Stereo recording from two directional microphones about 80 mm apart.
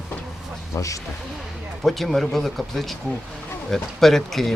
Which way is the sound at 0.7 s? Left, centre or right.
Left.